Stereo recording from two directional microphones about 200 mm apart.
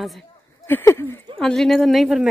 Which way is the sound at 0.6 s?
10° left (ahead or behind).